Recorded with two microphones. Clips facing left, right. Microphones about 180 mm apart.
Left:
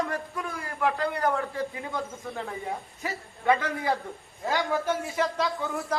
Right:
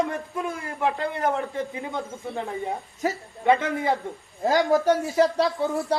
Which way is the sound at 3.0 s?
40° right (ahead or behind).